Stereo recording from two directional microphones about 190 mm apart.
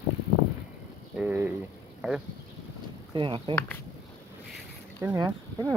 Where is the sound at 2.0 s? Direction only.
5° right (ahead or behind).